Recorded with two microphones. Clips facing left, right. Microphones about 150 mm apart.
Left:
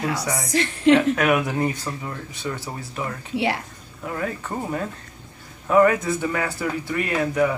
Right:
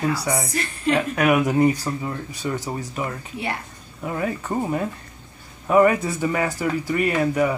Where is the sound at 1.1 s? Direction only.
10° right (ahead or behind).